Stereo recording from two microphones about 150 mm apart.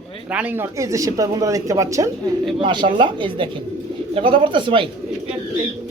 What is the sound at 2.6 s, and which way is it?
Speech, 35° right (ahead or behind).